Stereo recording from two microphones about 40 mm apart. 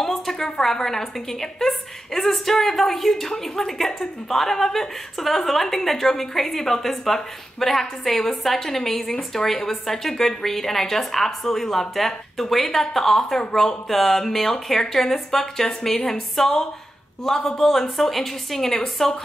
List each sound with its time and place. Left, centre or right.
0.0 s a woman's voice: centre